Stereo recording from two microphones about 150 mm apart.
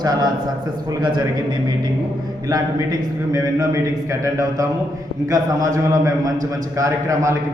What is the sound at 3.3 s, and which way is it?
A man's voice, 25° right (ahead or behind).